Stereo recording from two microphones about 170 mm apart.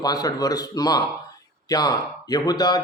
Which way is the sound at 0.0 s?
20° left (ahead or behind).